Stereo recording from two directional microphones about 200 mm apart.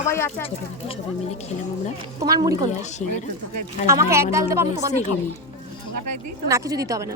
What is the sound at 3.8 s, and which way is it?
A woman's voice, 15° right (ahead or behind).